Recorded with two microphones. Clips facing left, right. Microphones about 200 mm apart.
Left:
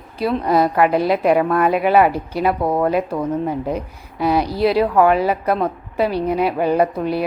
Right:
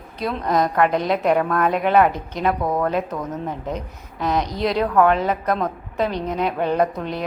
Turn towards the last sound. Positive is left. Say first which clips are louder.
# left 4 dB
turn(degrees=10)  # may be behind; listen again after turning